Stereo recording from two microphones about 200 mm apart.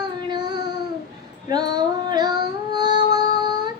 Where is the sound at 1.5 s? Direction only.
20° right (ahead or behind).